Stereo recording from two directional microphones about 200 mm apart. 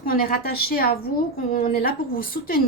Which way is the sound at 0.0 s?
45° left (ahead or behind).